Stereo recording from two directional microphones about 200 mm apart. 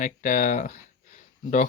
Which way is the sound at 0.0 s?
40° left (ahead or behind).